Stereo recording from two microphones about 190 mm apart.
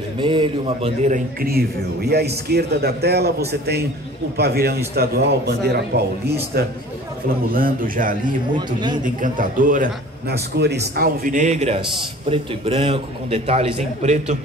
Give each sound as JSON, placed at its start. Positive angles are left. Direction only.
{"t": 0.2, "sound": "speech", "side_deg": -25}
{"t": 7.5, "sound": "a man's voice", "side_deg": -45}